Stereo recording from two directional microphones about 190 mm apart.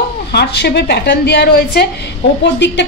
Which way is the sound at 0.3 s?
60° left (ahead or behind).